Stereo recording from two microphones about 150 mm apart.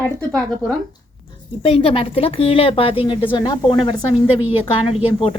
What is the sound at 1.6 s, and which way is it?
A woman's voice, 40° left (ahead or behind).